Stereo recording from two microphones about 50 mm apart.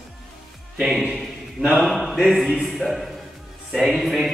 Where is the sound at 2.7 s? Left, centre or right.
Centre.